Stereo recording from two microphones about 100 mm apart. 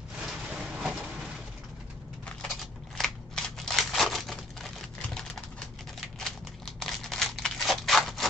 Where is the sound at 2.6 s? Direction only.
5° left (ahead or behind).